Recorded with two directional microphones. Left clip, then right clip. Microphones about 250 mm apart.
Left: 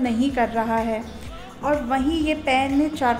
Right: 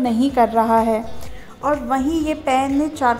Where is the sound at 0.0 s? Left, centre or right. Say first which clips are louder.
Right 5 dB; right.